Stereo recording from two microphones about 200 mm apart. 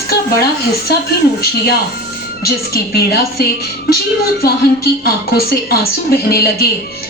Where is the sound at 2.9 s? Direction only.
50° left (ahead or behind).